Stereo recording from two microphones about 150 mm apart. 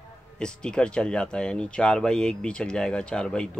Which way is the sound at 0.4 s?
5° left (ahead or behind).